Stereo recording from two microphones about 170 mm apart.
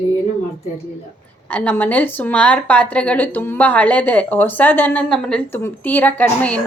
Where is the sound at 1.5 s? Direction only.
10° left (ahead or behind).